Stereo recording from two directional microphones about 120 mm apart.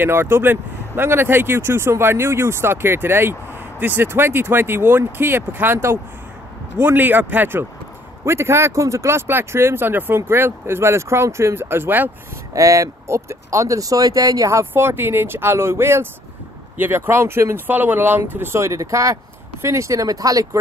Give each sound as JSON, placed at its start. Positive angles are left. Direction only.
{"t": 0.0, "sound": "speech", "side_deg": -20}
{"t": 12.5, "sound": "speech", "side_deg": -25}